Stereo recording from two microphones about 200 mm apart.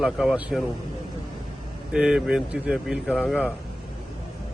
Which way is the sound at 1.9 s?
5° right (ahead or behind).